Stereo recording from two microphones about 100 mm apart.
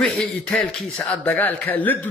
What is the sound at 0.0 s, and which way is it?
A man's voice, 5° left (ahead or behind).